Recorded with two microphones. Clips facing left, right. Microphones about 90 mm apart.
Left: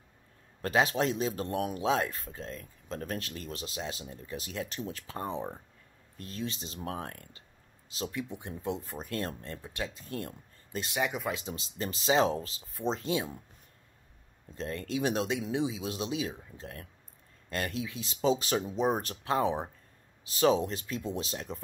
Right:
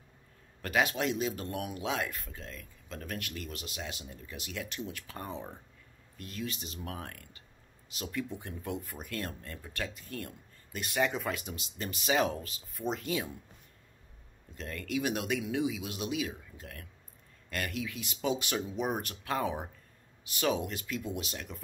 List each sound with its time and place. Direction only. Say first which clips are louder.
0.6 s speech: left 3 dB; 30° left (ahead or behind)
8.2 s speech: even; 20° left (ahead or behind)
9.9 s speech: left 3 dB; 30° left (ahead or behind)
11.0 s speech: right 1 dB; 10° left (ahead or behind)
11.3 s speech: left 3 dB; 30° left (ahead or behind)
14.6 s speech: left 2 dB; 30° left (ahead or behind)